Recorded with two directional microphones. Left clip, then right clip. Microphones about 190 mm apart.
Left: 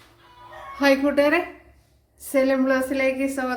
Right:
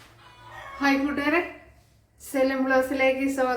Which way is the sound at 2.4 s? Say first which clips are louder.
Right 1 dB; 55° left (ahead or behind).